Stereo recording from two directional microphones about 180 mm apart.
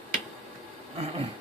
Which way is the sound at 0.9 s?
35° right (ahead or behind).